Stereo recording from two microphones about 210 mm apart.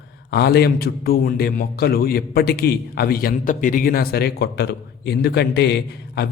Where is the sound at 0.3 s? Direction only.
50° left (ahead or behind).